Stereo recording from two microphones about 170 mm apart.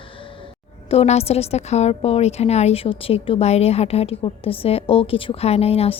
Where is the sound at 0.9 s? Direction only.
40° left (ahead or behind).